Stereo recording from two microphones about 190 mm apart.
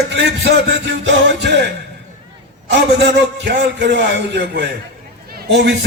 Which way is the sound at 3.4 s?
65° right (ahead or behind).